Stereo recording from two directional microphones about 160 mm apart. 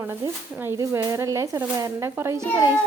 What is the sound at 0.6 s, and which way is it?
Speech, 15° right (ahead or behind).